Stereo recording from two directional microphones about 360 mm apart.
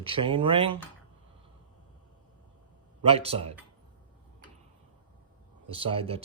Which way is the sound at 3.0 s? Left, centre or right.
Centre.